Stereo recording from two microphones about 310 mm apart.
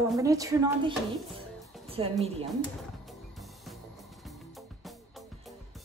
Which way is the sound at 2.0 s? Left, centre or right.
Centre.